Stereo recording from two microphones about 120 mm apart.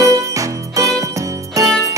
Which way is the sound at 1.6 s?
25° right (ahead or behind).